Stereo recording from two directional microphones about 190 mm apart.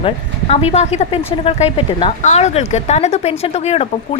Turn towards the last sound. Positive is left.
turn(degrees=35)  # may be behind; listen again after turning